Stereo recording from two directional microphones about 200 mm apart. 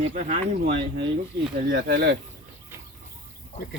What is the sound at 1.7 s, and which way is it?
Speech, 50° right (ahead or behind).